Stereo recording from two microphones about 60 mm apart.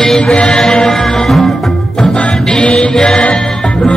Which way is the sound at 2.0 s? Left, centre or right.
Centre.